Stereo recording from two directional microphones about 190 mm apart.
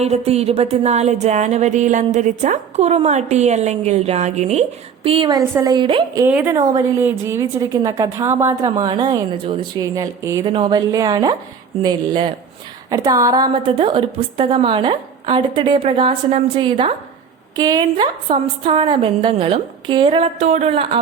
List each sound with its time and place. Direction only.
0.0 s music: 35° right (ahead or behind)
5.0 s a woman's voice: 30° right (ahead or behind)
6.2 s a woman's voice: 10° right (ahead or behind); by 21.0 s 30° right (ahead or behind)